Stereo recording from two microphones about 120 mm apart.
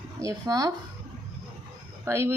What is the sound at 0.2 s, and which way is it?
Speech, 30° right (ahead or behind).